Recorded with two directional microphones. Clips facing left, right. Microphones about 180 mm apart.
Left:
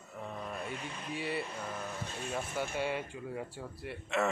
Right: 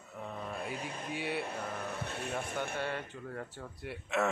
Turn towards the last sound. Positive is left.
turn(degrees=0)  # may be behind; listen again after turning